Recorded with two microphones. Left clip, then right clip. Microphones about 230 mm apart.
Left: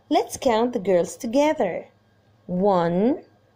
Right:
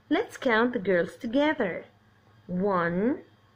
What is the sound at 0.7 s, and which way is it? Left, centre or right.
Speech, left.